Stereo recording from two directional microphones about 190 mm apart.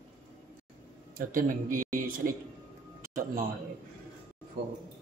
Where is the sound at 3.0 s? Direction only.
45° right (ahead or behind).